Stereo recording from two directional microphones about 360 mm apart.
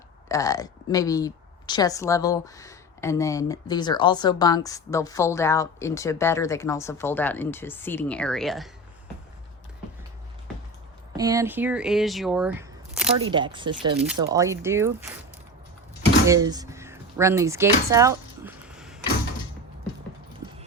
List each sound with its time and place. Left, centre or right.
0.3 s speech: centre
11.2 s speech: centre
16.2 s a sound: centre